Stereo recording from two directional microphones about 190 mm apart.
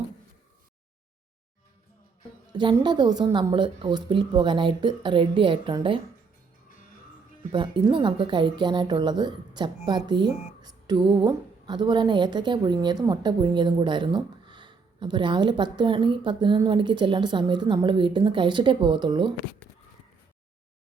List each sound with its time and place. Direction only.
2.5 s a woman's voice: 25° right (ahead or behind)
7.5 s a woman's voice: 25° right (ahead or behind)